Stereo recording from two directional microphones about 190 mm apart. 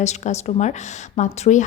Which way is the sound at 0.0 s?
35° left (ahead or behind).